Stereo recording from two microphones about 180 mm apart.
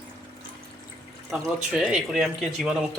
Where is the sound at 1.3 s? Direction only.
Centre (ahead or behind).